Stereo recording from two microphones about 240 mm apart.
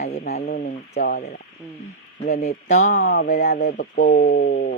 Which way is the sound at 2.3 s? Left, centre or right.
Left.